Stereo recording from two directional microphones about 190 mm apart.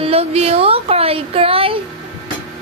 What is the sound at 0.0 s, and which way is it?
Speech, 30° right (ahead or behind).